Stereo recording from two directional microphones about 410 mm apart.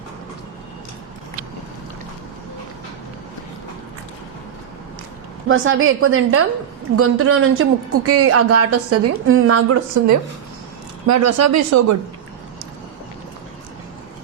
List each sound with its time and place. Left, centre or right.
5.5 s a woman's voice: right